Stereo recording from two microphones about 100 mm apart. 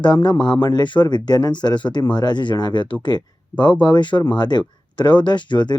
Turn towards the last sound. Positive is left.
turn(degrees=50)  # may be behind; listen again after turning